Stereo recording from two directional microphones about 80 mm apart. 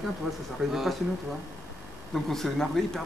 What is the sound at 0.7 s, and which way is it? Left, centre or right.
Speech, centre.